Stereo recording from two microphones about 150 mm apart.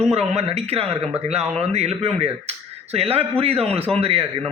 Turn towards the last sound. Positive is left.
turn(degrees=-40)  # may be behind; listen again after turning